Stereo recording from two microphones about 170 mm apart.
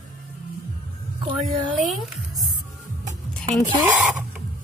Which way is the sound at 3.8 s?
5° right (ahead or behind).